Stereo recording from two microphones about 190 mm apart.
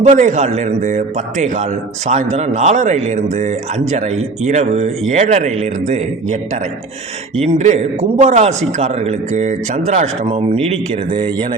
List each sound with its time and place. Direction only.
0.0 s a man's voice: 40° right (ahead or behind)
7.4 s a man's voice: 35° right (ahead or behind)